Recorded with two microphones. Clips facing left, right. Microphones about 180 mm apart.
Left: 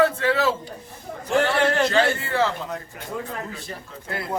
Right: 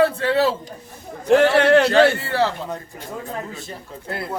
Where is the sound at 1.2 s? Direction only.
70° right (ahead or behind).